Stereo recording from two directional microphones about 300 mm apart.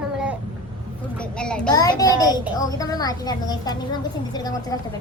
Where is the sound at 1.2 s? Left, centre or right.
Centre.